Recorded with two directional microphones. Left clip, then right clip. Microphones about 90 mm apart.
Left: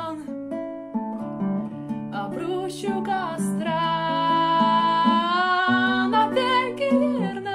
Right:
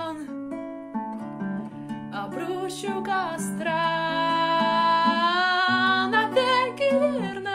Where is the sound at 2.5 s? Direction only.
35° right (ahead or behind).